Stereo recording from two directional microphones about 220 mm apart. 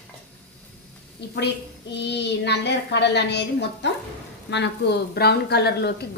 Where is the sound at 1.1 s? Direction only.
50° left (ahead or behind).